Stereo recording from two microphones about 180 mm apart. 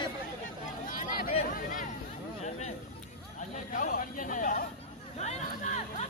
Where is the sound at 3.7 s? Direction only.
45° left (ahead or behind).